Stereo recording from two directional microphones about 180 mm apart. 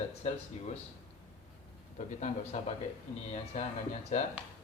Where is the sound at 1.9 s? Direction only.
40° left (ahead or behind).